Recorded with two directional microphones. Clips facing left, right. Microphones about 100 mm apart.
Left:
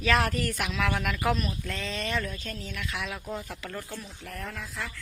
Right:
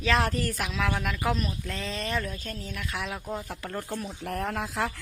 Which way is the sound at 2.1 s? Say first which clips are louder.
Right 1 dB; 5° right (ahead or behind).